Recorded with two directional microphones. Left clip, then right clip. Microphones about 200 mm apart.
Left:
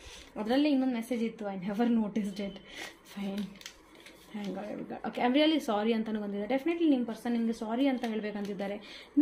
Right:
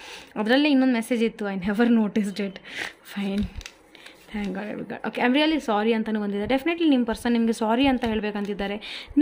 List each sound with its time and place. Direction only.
0.4 s speech: 40° right (ahead or behind)
4.4 s speech: 35° right (ahead or behind)